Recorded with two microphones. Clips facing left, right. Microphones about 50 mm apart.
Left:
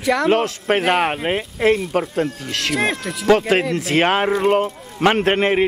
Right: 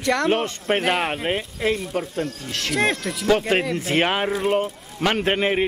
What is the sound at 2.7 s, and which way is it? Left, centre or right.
Speech, centre.